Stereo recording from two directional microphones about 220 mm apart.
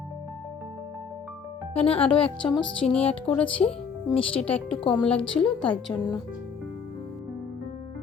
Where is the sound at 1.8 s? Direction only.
25° left (ahead or behind).